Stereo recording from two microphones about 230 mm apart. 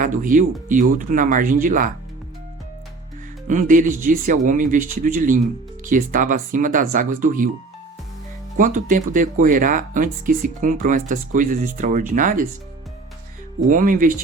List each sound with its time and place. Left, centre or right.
0.0 s speech: right
3.4 s speech: right
8.5 s speech: right
13.7 s speech: right